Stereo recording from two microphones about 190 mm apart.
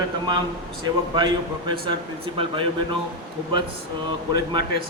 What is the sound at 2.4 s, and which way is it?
Speech, 25° right (ahead or behind).